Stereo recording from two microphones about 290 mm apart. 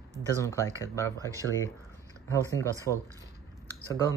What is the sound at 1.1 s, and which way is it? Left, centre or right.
Speech, centre.